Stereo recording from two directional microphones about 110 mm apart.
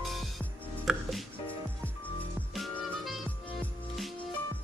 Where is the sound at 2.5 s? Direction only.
Centre (ahead or behind).